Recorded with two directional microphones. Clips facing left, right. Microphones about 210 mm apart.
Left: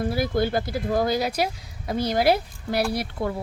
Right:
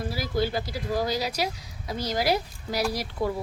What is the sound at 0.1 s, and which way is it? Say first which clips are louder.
Speech: left 1 dB; 55° left (ahead or behind).